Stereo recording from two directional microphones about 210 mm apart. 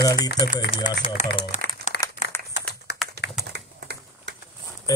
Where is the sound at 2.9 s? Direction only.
50° left (ahead or behind).